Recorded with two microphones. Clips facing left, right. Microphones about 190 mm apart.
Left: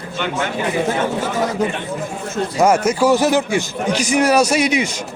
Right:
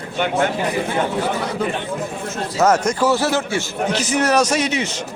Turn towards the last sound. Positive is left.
turn(degrees=10)  # may be behind; listen again after turning